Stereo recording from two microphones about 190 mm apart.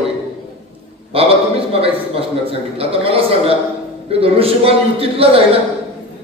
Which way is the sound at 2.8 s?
30° right (ahead or behind).